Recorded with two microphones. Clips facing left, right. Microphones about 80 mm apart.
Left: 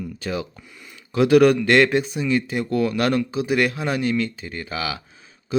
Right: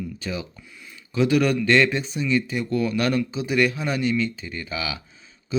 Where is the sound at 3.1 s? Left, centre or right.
Left.